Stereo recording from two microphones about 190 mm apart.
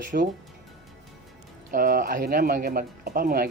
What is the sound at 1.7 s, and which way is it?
Speech, 45° right (ahead or behind).